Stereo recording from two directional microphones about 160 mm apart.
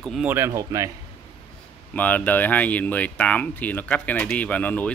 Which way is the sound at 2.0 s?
10° left (ahead or behind).